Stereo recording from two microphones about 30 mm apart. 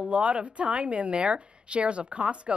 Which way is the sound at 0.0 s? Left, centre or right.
Right.